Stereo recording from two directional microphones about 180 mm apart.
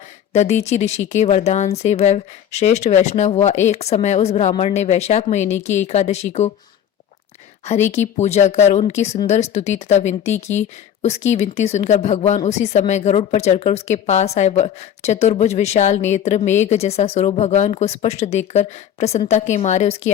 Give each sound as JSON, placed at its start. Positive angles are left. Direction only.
{"t": 0.3, "sound": "a woman's voice", "side_deg": 40}
{"t": 7.6, "sound": "a woman's voice", "side_deg": 40}